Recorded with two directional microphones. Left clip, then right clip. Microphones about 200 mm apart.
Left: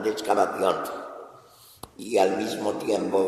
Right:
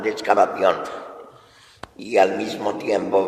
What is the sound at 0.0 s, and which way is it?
A man's voice, 20° right (ahead or behind).